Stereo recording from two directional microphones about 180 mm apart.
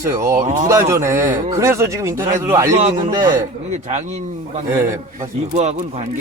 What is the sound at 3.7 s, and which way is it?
Speech, 40° right (ahead or behind).